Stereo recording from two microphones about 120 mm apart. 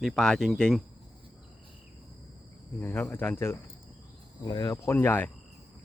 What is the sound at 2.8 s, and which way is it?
Speech, 15° left (ahead or behind).